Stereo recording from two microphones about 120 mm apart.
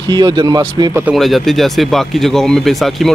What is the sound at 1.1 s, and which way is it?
Speech, centre (ahead or behind).